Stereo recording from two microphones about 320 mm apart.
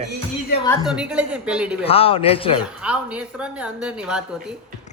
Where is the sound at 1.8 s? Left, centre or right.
Centre.